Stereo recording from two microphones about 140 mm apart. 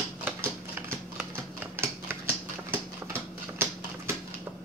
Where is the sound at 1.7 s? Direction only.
15° right (ahead or behind).